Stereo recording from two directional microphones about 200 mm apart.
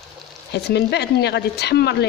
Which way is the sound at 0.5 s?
55° left (ahead or behind).